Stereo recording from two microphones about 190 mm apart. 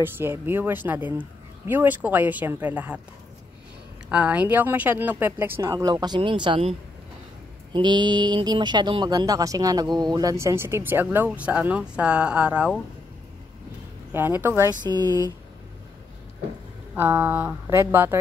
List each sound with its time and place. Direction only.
0.0 s speech: 10° right (ahead or behind)
4.1 s speech: 5° right (ahead or behind); by 6.7 s 25° right (ahead or behind)
7.7 s speech: 25° right (ahead or behind); by 12.8 s 5° right (ahead or behind)
14.1 s speech: 10° right (ahead or behind)
16.9 s speech: 10° right (ahead or behind)